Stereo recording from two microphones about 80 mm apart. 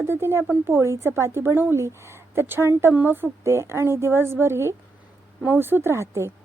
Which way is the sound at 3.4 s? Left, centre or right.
Right.